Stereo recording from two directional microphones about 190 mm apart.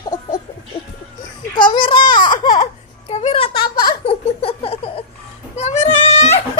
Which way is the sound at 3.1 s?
30° left (ahead or behind).